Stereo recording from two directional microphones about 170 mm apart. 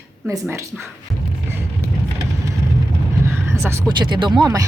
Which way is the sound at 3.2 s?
15° right (ahead or behind).